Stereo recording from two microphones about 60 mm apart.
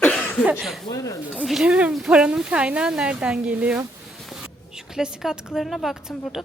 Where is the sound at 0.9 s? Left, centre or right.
Left.